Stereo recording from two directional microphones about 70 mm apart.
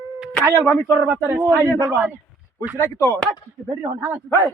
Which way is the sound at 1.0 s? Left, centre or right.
Right.